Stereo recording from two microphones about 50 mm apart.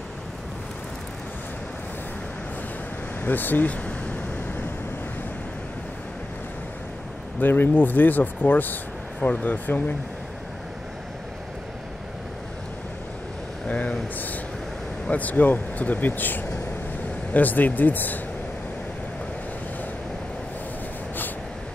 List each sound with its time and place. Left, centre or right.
3.3 s speech: left
3.7 s a sound: left
7.3 s speech: left
13.7 s speech: left